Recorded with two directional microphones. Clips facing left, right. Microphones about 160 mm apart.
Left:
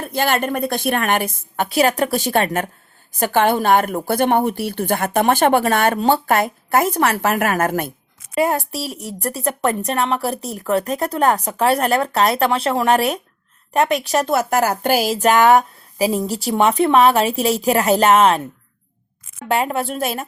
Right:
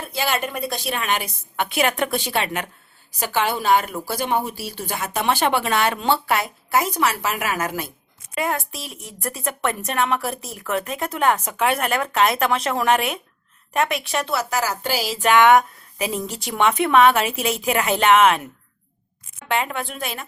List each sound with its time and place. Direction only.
0.1 s a woman's voice: 55° left (ahead or behind)
8.4 s speech: 35° left (ahead or behind)
19.5 s speech: 40° left (ahead or behind)